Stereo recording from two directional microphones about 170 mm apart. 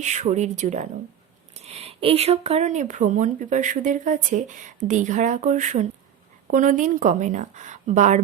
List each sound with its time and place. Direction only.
0.0 s speech: 45° right (ahead or behind)